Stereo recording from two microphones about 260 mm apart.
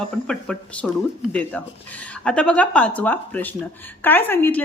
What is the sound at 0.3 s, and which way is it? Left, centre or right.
A woman's voice, centre.